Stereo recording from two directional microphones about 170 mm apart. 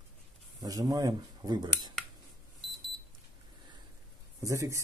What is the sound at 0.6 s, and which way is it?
Speech, 20° right (ahead or behind).